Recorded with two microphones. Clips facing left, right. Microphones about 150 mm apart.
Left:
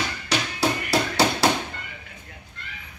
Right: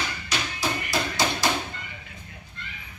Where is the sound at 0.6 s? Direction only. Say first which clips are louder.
Left 5 dB; 70° left (ahead or behind).